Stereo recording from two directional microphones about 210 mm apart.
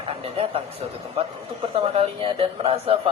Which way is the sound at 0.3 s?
25° right (ahead or behind).